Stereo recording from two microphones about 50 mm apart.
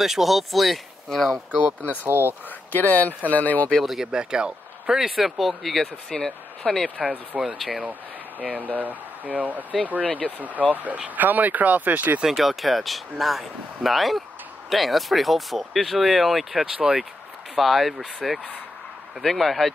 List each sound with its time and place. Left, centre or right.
0.0 s speech: centre
2.0 s speech: right
2.7 s speech: left
3.8 s speech: centre
7.0 s speech: right
7.5 s speech: centre
8.5 s speech: right
10.0 s speech: left
10.7 s speech: right
12.2 s speech: centre
16.7 s speech: centre
17.6 s speech: centre